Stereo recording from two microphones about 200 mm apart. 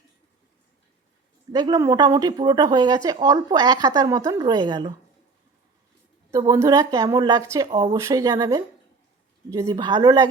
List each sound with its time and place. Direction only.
1.5 s speech: 20° right (ahead or behind)
6.3 s a woman's voice: 15° right (ahead or behind)